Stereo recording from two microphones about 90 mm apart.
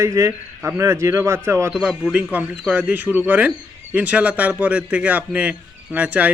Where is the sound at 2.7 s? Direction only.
20° right (ahead or behind).